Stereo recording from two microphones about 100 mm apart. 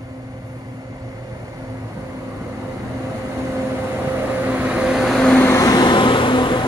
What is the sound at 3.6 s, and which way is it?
Vehicle, 25° right (ahead or behind).